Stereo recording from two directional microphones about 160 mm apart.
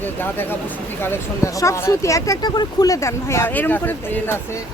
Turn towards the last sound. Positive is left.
turn(degrees=15)  # may be behind; listen again after turning